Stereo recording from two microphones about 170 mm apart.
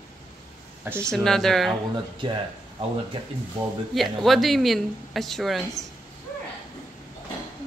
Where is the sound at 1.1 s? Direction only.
5° left (ahead or behind).